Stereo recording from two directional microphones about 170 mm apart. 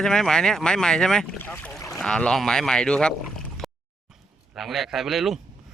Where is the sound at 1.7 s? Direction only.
15° left (ahead or behind).